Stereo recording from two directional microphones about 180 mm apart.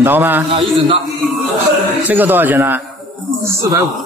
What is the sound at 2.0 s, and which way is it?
Speech, 10° right (ahead or behind).